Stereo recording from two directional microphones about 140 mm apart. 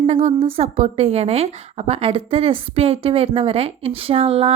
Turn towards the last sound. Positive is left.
turn(degrees=-40)  # may be behind; listen again after turning